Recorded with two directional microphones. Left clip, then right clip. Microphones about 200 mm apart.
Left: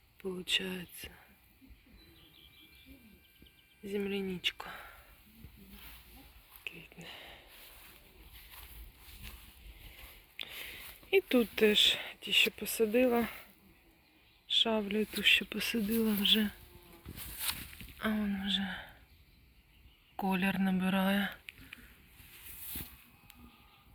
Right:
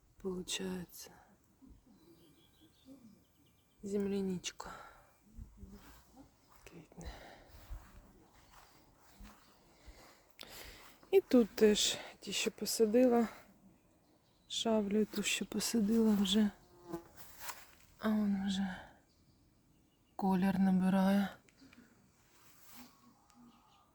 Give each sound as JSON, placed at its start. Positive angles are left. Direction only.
{"t": 0.2, "sound": "speech", "side_deg": -5}
{"t": 3.8, "sound": "speech", "side_deg": -5}
{"t": 6.7, "sound": "a sound", "side_deg": -10}
{"t": 10.3, "sound": "a sound", "side_deg": -20}
{"t": 12.3, "sound": "speech", "side_deg": -10}
{"t": 14.6, "sound": "speech", "side_deg": -10}
{"t": 15.2, "sound": "speech", "side_deg": -25}
{"t": 18.0, "sound": "speech", "side_deg": -10}
{"t": 20.3, "sound": "speech", "side_deg": -10}